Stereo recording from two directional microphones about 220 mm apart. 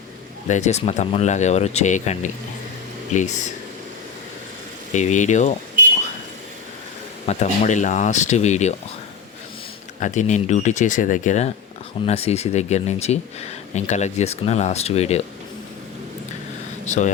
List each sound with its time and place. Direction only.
0.4 s speech: 30° left (ahead or behind)
4.9 s speech: 35° left (ahead or behind)
7.3 s speech: 30° left (ahead or behind)
10.0 s speech: 35° left (ahead or behind)
16.8 s speech: 35° left (ahead or behind)